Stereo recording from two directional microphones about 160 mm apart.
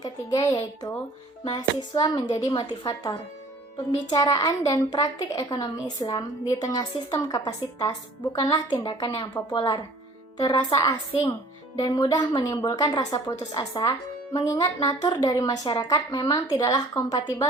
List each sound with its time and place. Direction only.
0.0 s a child's voice: 20° left (ahead or behind)